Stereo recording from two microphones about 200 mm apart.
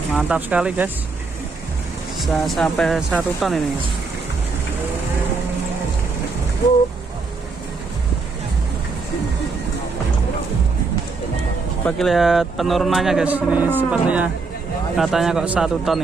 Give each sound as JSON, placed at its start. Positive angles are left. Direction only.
{"t": 0.2, "sound": "speech", "side_deg": -5}
{"t": 2.1, "sound": "speech", "side_deg": 0}
{"t": 11.9, "sound": "speech", "side_deg": 0}